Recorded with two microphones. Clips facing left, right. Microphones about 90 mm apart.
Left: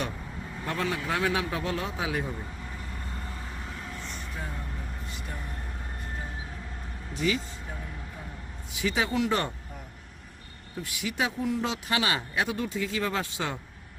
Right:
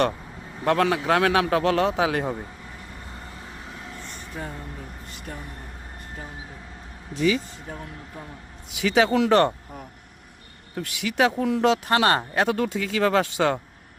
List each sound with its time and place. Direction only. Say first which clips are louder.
0.6 s speech: right 10 dB; 85° right
8.7 s speech: right 8 dB; 85° right
11.9 s speech: right 8 dB; 50° right (ahead or behind); by 13.6 s 75° right (ahead or behind)